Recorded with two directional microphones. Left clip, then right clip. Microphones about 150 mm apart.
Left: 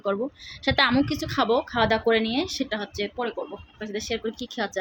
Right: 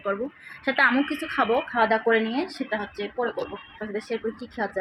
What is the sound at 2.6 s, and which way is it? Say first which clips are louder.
Speech: even; 30° left (ahead or behind).